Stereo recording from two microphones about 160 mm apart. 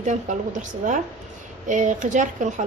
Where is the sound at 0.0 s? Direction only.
50° right (ahead or behind).